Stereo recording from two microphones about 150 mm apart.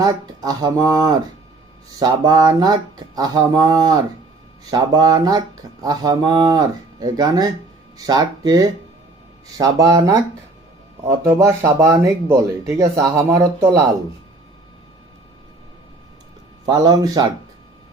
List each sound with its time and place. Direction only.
0.0 s speech: 25° right (ahead or behind)
16.6 s speech: 25° right (ahead or behind)